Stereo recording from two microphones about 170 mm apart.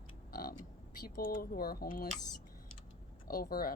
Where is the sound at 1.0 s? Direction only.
60° left (ahead or behind).